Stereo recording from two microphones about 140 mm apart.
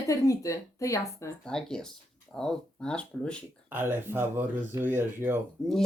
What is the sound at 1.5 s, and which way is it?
Speech, 5° left (ahead or behind).